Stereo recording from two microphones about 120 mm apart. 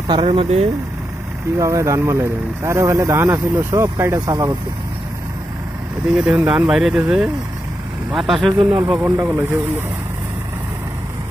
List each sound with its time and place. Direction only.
0.1 s speech: 50° right (ahead or behind)
1.6 s speech: 25° right (ahead or behind)
6.0 s speech: 10° right (ahead or behind)